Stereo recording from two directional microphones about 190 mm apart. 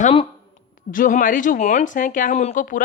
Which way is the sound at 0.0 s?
30° left (ahead or behind).